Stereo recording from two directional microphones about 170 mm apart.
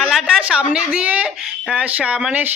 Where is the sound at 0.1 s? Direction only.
5° right (ahead or behind).